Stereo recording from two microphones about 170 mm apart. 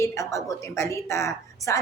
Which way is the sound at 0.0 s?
15° left (ahead or behind).